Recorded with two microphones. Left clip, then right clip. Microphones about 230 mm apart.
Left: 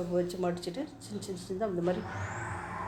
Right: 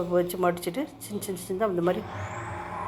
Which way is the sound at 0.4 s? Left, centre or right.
Right.